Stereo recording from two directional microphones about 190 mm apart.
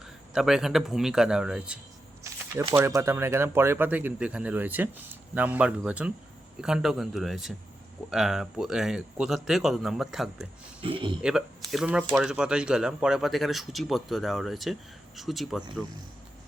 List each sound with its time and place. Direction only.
0.0 s speech: 5° right (ahead or behind)
2.3 s shuffling cards: 15° right (ahead or behind)
2.7 s speech: 15° right (ahead or behind)
10.8 s speech: 25° right (ahead or behind)
11.2 s speech: 5° right (ahead or behind)